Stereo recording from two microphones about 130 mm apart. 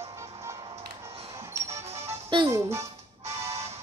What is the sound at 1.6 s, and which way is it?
Music, 55° right (ahead or behind).